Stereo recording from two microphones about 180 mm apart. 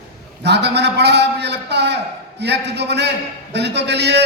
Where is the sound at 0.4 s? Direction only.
70° right (ahead or behind).